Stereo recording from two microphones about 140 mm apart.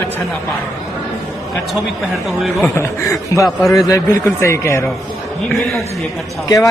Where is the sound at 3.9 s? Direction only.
20° left (ahead or behind).